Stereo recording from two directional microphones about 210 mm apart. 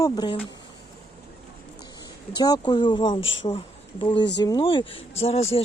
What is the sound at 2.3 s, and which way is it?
Speech, 20° left (ahead or behind).